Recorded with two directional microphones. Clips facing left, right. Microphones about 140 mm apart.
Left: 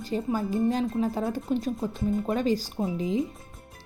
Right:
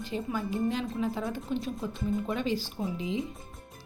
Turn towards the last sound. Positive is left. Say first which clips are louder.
# left 5 dB
turn(degrees=45)  # may be behind; listen again after turning